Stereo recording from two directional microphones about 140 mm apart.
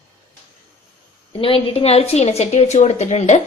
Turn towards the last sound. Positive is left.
turn(degrees=55)  # may be behind; listen again after turning